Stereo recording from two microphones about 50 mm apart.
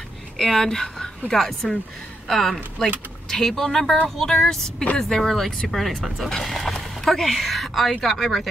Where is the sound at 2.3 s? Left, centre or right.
Centre.